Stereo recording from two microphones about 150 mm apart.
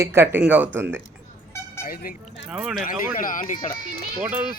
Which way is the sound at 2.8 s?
65° left (ahead or behind).